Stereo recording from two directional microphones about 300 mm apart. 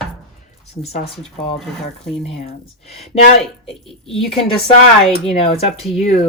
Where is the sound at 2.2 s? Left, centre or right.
Left.